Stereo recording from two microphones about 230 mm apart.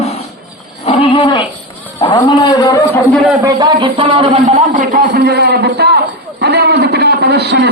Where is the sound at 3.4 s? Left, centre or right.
Centre.